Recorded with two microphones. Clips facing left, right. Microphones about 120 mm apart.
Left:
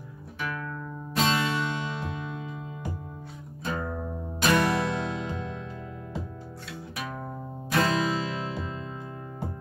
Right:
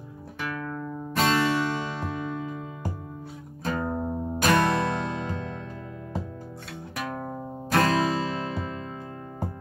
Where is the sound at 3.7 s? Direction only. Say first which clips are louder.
Right 4 dB; 50° right (ahead or behind).